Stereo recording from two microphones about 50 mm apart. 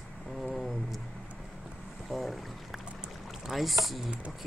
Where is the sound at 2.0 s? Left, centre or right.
Centre.